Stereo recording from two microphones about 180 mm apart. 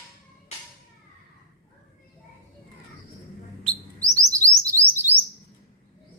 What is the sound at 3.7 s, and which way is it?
Chirp, 20° right (ahead or behind).